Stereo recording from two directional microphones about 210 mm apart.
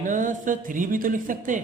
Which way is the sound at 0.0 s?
40° right (ahead or behind).